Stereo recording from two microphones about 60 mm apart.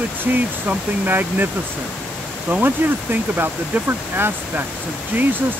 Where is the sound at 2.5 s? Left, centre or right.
Right.